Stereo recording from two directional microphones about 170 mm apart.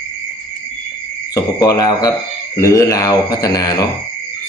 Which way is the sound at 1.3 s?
20° left (ahead or behind).